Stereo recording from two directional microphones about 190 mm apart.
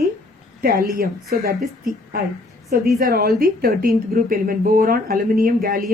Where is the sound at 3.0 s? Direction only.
50° right (ahead or behind).